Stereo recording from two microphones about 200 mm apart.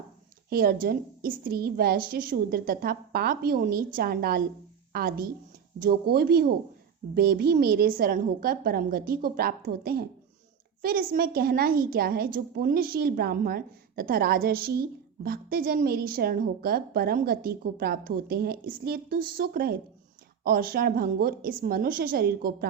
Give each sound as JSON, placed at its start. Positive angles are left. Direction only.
{"t": 0.5, "sound": "a woman's voice", "side_deg": -50}